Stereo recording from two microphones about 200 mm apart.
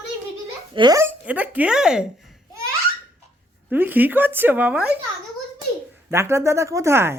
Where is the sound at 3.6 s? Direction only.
10° right (ahead or behind).